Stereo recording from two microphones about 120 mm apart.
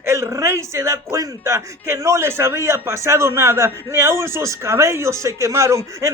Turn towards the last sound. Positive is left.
turn(degrees=-25)  # may be behind; listen again after turning